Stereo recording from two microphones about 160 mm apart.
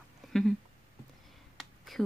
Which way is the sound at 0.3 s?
5° left (ahead or behind).